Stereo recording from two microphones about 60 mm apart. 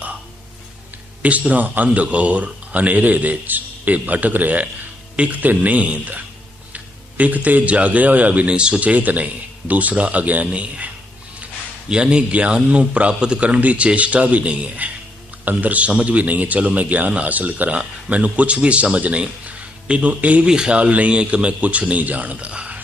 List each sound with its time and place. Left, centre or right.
1.2 s speech: right